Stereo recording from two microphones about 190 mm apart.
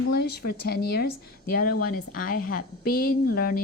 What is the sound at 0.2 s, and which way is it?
A woman's voice, 55° left (ahead or behind).